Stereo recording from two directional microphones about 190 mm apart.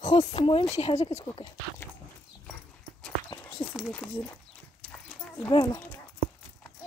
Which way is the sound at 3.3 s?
25° left (ahead or behind).